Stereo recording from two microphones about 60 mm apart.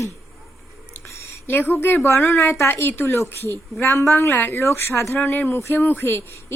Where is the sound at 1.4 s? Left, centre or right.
Left.